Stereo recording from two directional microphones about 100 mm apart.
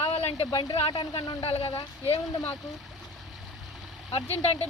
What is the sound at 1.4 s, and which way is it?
Speech, 70° left (ahead or behind).